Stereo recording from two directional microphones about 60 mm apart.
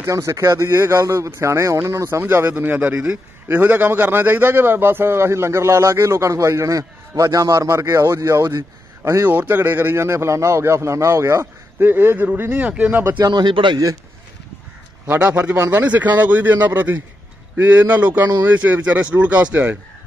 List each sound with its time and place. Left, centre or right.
0.1 s a man's voice: right
2.1 s a man's voice: right
7.7 s speech: right
9.0 s a man's voice: right
11.8 s speech: right
12.5 s speech: right
13.2 s a man's voice: right
15.1 s speech: right